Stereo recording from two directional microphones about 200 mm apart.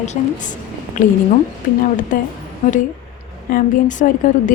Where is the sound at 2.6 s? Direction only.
35° left (ahead or behind).